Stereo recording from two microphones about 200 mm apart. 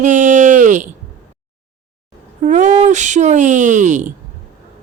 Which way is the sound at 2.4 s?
35° right (ahead or behind).